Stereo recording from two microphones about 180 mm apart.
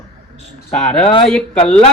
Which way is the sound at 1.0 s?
30° left (ahead or behind).